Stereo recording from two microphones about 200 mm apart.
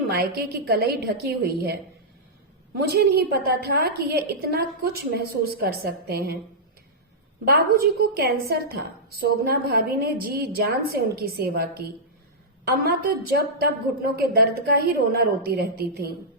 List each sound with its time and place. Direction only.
0.2 s a woman's voice: 50° right (ahead or behind)
7.4 s a woman's voice: 50° right (ahead or behind)
12.8 s a woman's voice: 50° right (ahead or behind)